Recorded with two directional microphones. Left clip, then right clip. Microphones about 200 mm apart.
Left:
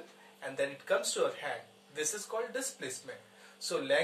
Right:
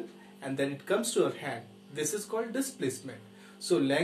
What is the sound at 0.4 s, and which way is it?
Speech, 15° right (ahead or behind).